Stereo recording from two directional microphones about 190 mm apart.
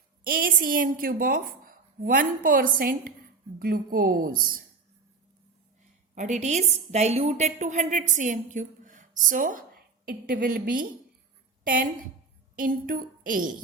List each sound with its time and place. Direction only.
0.3 s a woman's voice: 50° right (ahead or behind)
6.1 s a woman's voice: 40° right (ahead or behind)